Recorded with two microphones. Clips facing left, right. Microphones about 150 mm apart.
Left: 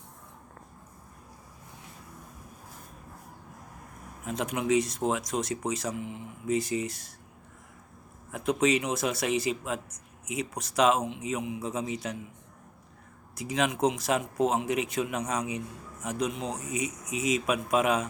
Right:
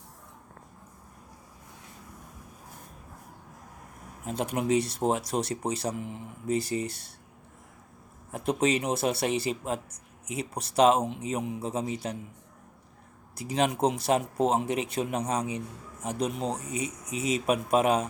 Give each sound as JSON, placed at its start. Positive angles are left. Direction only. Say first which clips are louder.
{"t": 4.3, "sound": "speech", "louder": "even", "side_deg": -35}
{"t": 8.3, "sound": "speech", "louder": "left 1 dB", "side_deg": -30}
{"t": 13.3, "sound": "speech", "louder": "right 2 dB", "side_deg": -35}